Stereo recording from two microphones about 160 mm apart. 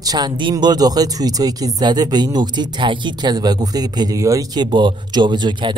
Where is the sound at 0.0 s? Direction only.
25° right (ahead or behind).